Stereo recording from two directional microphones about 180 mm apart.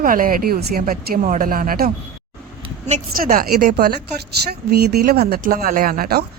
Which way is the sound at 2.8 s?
40° right (ahead or behind).